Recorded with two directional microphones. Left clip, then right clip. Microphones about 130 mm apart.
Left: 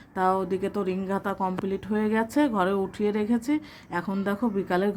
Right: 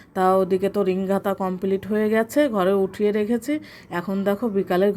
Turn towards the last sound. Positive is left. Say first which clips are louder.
# right 5 dB
turn(degrees=-15)  # may be behind; listen again after turning